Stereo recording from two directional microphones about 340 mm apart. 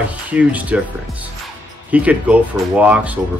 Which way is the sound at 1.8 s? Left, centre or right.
Centre.